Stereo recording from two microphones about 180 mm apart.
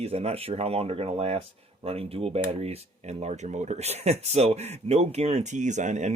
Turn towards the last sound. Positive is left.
turn(degrees=-40)  # may be behind; listen again after turning